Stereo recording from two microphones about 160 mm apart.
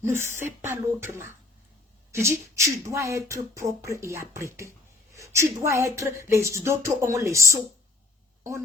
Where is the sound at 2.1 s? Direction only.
15° right (ahead or behind).